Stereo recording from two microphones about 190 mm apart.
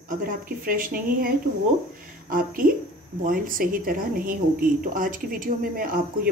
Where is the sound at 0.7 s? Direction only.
45° right (ahead or behind).